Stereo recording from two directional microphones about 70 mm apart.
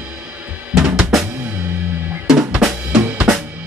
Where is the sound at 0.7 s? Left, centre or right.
Centre.